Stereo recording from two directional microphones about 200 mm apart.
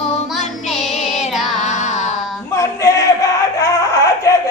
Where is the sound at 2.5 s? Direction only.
15° left (ahead or behind).